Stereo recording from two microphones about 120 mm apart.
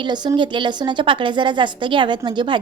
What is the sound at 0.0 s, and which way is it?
A woman's voice, 35° right (ahead or behind).